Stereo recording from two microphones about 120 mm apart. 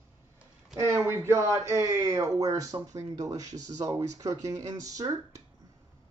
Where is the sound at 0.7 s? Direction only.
20° right (ahead or behind).